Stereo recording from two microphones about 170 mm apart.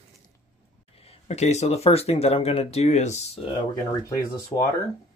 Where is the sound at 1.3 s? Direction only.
40° left (ahead or behind).